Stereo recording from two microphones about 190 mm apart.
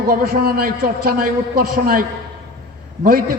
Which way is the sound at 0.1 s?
50° right (ahead or behind).